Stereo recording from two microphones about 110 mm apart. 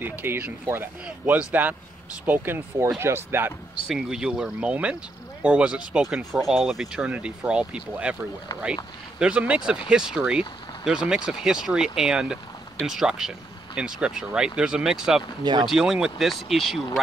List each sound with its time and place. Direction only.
0.0 s speech: 20° right (ahead or behind)
3.8 s speech: 5° right (ahead or behind)
9.2 s speech: 10° right (ahead or behind)